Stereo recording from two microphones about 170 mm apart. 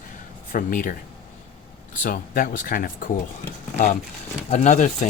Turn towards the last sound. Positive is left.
turn(degrees=45)  # may be behind; listen again after turning